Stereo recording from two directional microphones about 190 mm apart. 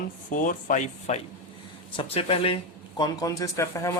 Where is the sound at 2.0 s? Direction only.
30° left (ahead or behind).